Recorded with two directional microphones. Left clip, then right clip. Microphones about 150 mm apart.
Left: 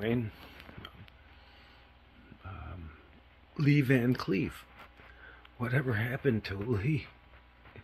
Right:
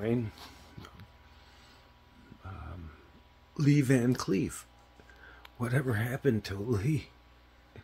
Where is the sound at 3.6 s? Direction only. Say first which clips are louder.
Right 1 dB; 15° right (ahead or behind).